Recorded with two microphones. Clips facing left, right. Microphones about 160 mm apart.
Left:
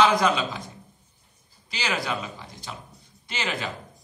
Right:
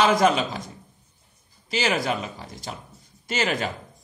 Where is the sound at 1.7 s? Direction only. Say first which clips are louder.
Right 5 dB; 45° right (ahead or behind).